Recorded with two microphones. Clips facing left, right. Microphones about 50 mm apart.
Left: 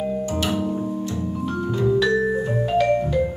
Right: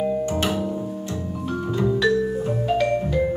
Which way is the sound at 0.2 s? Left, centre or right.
Right.